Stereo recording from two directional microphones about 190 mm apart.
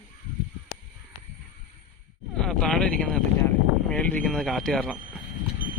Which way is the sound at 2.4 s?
5° left (ahead or behind).